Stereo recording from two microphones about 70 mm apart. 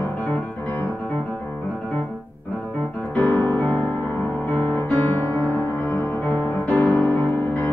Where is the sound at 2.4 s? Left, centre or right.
Centre.